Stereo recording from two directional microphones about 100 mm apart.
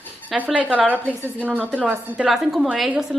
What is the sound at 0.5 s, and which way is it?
A woman's voice, 15° right (ahead or behind).